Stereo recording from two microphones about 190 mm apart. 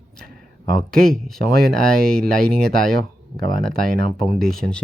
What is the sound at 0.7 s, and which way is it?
Speech, 5° left (ahead or behind).